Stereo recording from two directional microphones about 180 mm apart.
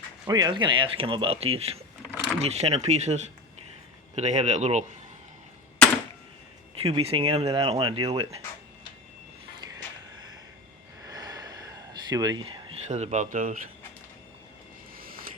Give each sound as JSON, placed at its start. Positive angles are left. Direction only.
{"t": 0.3, "sound": "speech", "side_deg": -20}
{"t": 6.7, "sound": "speech", "side_deg": -30}
{"t": 9.6, "sound": "a sound", "side_deg": -20}
{"t": 11.0, "sound": "gasp", "side_deg": -20}
{"t": 12.9, "sound": "speech", "side_deg": -40}